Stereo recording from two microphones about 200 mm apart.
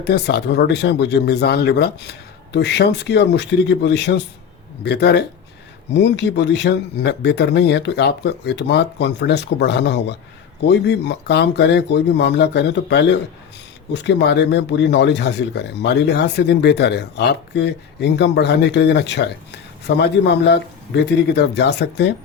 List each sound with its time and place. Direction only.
0.0 s speech: 55° left (ahead or behind)